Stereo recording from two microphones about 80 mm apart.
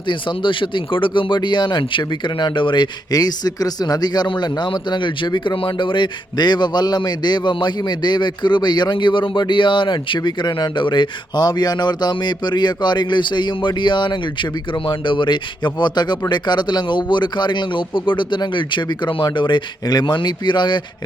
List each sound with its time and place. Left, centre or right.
0.1 s speech: left
10.2 s speech: left